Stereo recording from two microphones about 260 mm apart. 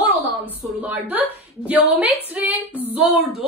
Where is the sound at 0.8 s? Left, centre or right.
Centre.